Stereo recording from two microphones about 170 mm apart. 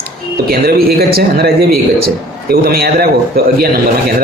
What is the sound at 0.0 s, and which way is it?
A man's voice, 65° right (ahead or behind).